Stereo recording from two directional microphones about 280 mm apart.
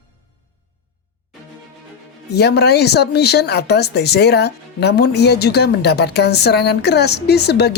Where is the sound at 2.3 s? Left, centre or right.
Left.